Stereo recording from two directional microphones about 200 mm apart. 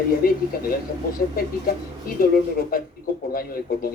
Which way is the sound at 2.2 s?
45° left (ahead or behind).